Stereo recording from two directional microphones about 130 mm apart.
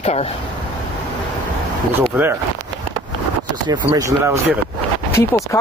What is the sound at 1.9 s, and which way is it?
Speech, 15° right (ahead or behind).